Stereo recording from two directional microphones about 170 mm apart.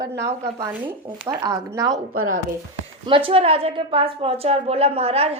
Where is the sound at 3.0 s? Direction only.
30° right (ahead or behind).